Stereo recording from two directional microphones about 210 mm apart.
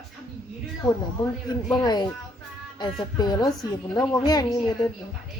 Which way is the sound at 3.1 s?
20° left (ahead or behind).